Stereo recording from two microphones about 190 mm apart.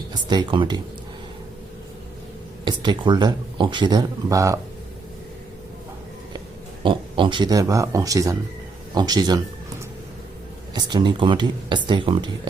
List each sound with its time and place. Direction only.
0.1 s speech: 20° right (ahead or behind)
2.6 s speech: 25° right (ahead or behind)
6.8 s a man's voice: 25° right (ahead or behind)
10.8 s speech: 20° right (ahead or behind)